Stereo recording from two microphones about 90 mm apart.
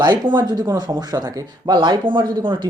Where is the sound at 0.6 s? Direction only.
45° right (ahead or behind).